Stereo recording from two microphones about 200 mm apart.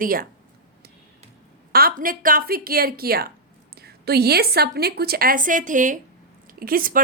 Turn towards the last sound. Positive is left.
turn(degrees=-45)  # may be behind; listen again after turning